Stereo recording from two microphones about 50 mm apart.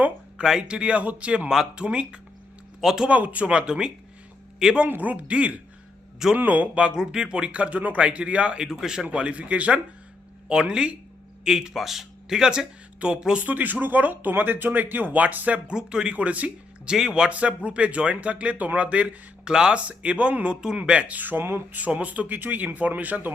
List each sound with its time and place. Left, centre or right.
0.4 s speech: centre
0.8 s speech: right
3.1 s speech: right
4.9 s speech: right
8.6 s speech: centre
9.0 s speech: right
10.5 s speech: centre
13.4 s speech: right
15.7 s speech: centre
16.9 s speech: centre
19.5 s speech: centre
19.8 s speech: right
21.4 s speech: right
21.8 s speech: right